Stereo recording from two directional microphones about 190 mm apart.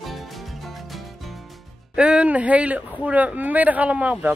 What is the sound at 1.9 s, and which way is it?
Speech, 5° right (ahead or behind).